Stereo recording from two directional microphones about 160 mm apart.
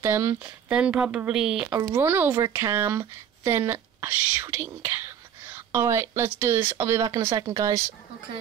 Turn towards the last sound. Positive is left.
turn(degrees=-20)  # may be behind; listen again after turning